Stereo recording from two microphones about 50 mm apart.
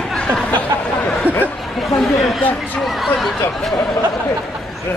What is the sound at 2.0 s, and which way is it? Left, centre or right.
Speech, centre.